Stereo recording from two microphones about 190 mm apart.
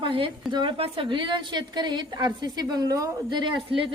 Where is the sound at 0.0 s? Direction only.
25° right (ahead or behind).